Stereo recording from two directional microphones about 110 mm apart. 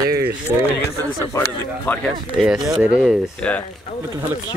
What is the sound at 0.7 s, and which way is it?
Speech, 25° left (ahead or behind).